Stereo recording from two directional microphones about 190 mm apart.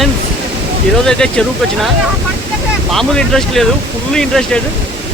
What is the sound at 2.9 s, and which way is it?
Speech, centre (ahead or behind).